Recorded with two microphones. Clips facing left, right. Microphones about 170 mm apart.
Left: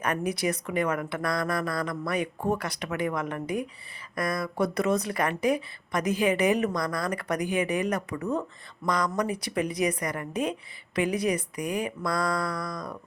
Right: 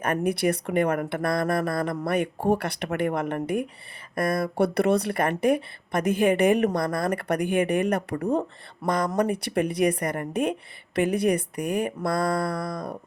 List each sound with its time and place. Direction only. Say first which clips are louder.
0.0 s a woman's voice: right 4 dB; 55° right (ahead or behind)